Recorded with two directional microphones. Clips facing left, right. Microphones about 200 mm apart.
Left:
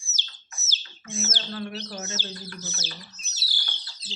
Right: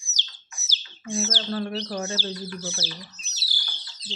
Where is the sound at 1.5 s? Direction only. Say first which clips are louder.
Right 5 dB; 35° right (ahead or behind).